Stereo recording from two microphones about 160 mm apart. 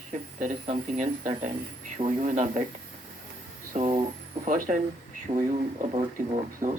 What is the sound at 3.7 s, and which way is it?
Speech, 45° right (ahead or behind).